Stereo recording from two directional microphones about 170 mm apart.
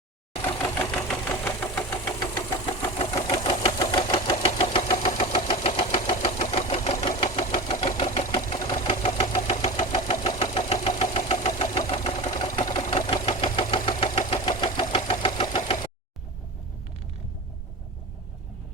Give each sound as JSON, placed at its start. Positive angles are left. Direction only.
{"t": 0.8, "sound": "engine", "side_deg": 5}
{"t": 2.2, "sound": "engine", "side_deg": 30}